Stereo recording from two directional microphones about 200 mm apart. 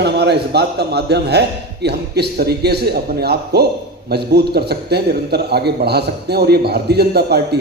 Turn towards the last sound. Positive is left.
turn(degrees=-55)  # may be behind; listen again after turning